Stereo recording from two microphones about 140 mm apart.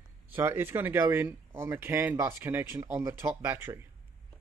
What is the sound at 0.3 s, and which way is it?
Speech, 15° right (ahead or behind).